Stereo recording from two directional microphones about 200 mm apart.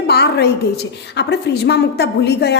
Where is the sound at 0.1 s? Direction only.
55° left (ahead or behind).